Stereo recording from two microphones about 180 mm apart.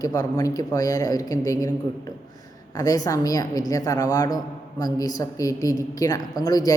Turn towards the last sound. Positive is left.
turn(degrees=20)  # may be behind; listen again after turning